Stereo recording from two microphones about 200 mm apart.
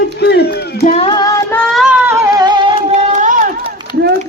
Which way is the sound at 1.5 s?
Centre (ahead or behind).